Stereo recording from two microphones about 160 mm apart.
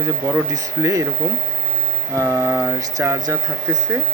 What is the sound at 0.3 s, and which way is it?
Speech, 20° right (ahead or behind).